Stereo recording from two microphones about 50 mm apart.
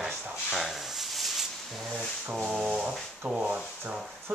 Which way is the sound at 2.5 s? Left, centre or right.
Right.